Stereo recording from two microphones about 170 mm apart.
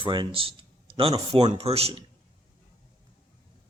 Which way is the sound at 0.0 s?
30° right (ahead or behind).